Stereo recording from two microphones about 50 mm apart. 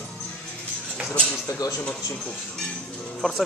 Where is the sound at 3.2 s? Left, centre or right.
Centre.